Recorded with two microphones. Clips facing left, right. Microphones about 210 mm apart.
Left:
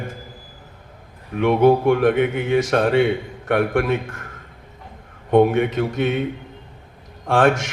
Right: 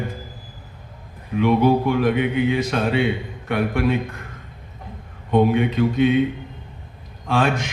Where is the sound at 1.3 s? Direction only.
60° left (ahead or behind).